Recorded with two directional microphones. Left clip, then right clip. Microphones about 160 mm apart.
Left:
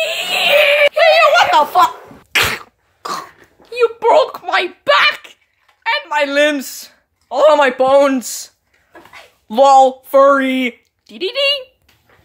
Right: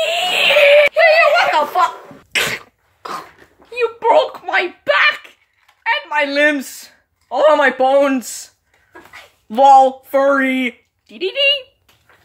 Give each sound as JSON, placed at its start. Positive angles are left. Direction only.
{"t": 0.4, "sound": "synthetic singing", "side_deg": 65}
{"t": 0.9, "sound": "a sound", "side_deg": 25}
{"t": 2.3, "sound": "cough", "side_deg": 20}
{"t": 3.7, "sound": "a sound", "side_deg": 25}
{"t": 5.9, "sound": "speech", "side_deg": 20}
{"t": 9.5, "sound": "speech", "side_deg": 20}